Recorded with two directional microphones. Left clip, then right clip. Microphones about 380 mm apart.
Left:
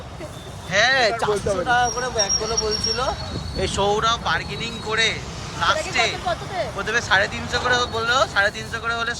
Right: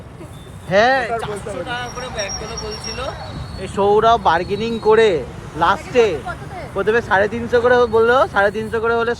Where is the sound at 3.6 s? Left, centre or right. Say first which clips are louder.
Right 6 dB; centre.